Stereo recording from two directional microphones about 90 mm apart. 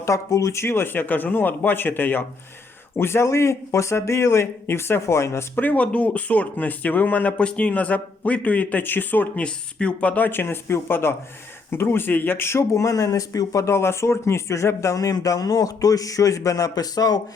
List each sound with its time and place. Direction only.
0.0 s speech: 35° left (ahead or behind)